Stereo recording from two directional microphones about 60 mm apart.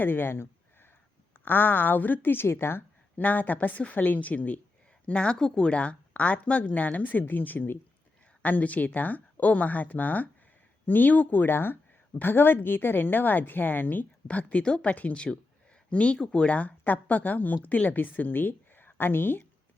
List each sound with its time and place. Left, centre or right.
0.0 s a woman's voice: left
3.2 s a woman's voice: left
14.3 s speech: left